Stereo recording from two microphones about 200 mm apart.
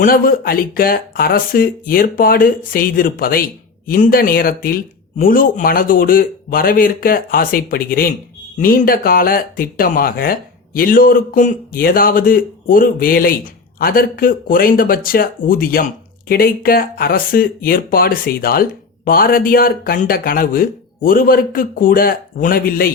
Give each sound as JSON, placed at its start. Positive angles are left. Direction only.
{"t": 0.0, "sound": "speech", "side_deg": 45}